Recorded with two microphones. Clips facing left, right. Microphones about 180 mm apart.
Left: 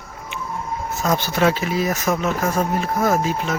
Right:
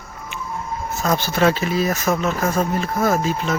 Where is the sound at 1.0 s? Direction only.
15° left (ahead or behind).